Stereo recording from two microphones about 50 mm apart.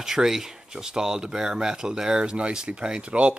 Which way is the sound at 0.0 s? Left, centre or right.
Centre.